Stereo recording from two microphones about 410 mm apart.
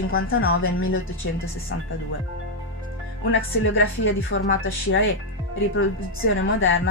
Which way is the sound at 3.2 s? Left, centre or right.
Left.